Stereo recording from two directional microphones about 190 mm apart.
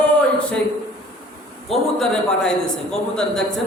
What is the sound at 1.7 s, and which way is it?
A woman's voice, 5° left (ahead or behind).